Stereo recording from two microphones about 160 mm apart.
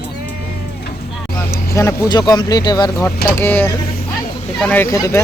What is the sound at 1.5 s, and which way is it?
Speech, 20° left (ahead or behind).